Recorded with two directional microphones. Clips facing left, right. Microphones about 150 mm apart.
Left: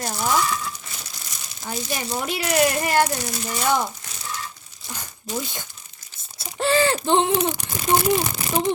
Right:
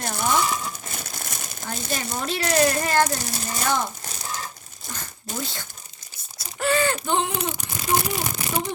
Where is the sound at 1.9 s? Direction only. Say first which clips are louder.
Even; 10° left (ahead or behind).